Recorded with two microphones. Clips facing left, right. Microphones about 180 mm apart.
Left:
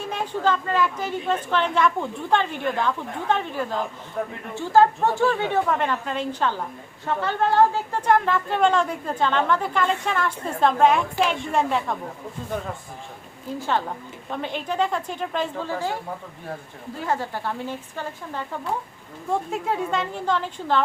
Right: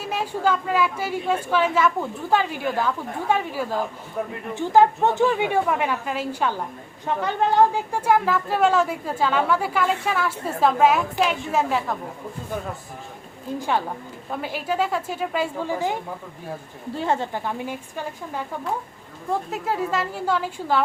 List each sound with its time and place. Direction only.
0.0 s a woman's voice: 5° right (ahead or behind)
4.5 s a woman's voice: 15° right (ahead or behind)
13.6 s a woman's voice: 10° right (ahead or behind)
16.9 s a woman's voice: 25° right (ahead or behind)
19.3 s a woman's voice: centre (ahead or behind)